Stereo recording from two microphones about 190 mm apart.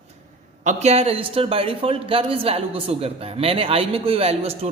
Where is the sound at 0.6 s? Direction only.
40° right (ahead or behind).